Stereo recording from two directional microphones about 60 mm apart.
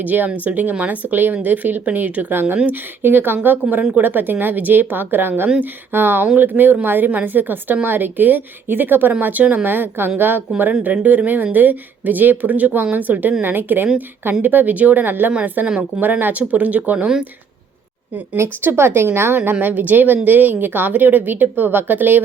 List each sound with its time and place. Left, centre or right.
0.0 s a woman's voice: right
18.6 s a woman's voice: right
19.6 s a woman's voice: right